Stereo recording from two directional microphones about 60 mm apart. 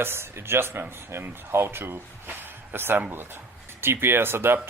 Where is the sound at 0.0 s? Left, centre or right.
Right.